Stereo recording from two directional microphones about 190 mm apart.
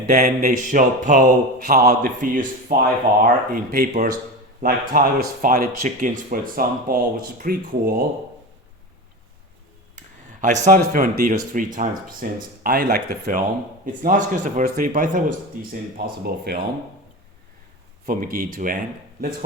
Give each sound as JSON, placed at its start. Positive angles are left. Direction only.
{"t": 0.2, "sound": "a man's voice", "side_deg": -50}
{"t": 10.4, "sound": "a man's voice", "side_deg": -45}
{"t": 18.0, "sound": "a man's voice", "side_deg": -50}